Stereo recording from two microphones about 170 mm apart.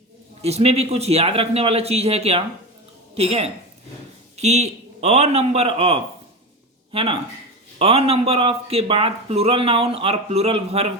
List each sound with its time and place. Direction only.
0.4 s a man's voice: 40° right (ahead or behind)